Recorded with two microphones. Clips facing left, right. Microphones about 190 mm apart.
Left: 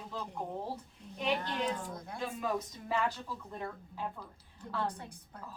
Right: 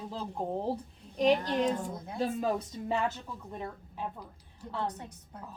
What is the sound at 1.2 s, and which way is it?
A woman's voice, 40° right (ahead or behind).